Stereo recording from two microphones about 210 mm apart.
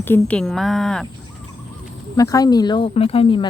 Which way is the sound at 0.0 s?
10° left (ahead or behind).